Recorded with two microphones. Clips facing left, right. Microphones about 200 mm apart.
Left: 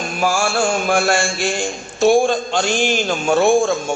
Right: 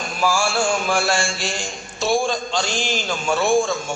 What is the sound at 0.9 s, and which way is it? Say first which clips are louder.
A man's voice: left 4 dB; 50° left (ahead or behind).